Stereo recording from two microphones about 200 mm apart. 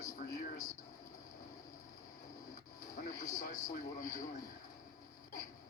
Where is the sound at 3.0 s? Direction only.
40° left (ahead or behind).